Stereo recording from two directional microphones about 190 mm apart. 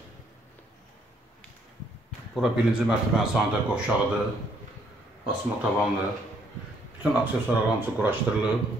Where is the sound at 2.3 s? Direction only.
5° right (ahead or behind).